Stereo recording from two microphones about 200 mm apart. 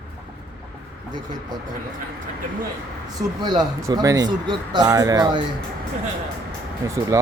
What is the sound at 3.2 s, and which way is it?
Speech, 20° right (ahead or behind).